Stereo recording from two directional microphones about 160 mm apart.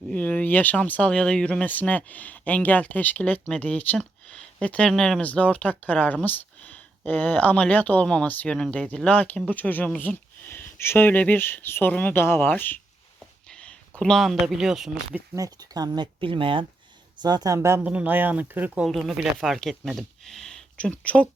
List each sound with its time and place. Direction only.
0.1 s speech: 10° left (ahead or behind)
15.4 s speech: 25° right (ahead or behind); by 21.2 s 10° left (ahead or behind)